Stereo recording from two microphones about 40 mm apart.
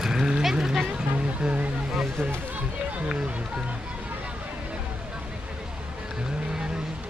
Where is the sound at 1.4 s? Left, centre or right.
Right.